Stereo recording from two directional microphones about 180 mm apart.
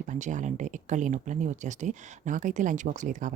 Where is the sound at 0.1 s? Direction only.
45° right (ahead or behind).